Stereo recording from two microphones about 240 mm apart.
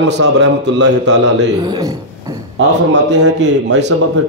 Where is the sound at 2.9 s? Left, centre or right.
Right.